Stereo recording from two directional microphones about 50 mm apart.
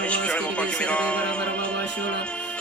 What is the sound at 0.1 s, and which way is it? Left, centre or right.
Music, left.